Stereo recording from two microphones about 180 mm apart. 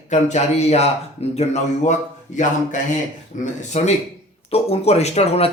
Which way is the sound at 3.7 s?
35° left (ahead or behind).